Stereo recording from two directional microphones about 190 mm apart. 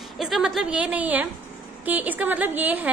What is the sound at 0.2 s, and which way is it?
A woman's voice, centre (ahead or behind).